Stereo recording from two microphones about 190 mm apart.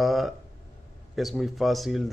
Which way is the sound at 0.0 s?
Centre (ahead or behind).